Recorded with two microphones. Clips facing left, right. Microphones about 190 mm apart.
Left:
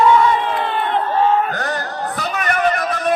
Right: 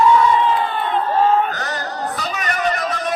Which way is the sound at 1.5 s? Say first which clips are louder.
Left 2 dB; 55° left (ahead or behind).